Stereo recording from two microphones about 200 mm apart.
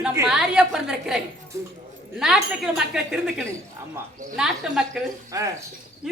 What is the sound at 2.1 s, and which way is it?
A woman's voice, 5° right (ahead or behind).